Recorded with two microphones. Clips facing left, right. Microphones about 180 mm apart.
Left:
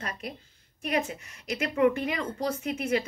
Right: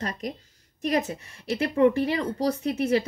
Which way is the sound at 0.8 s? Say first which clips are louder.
Right 4 dB; 35° right (ahead or behind).